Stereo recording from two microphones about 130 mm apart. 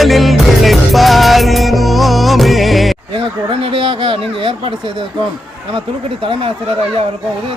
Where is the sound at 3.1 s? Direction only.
45° right (ahead or behind).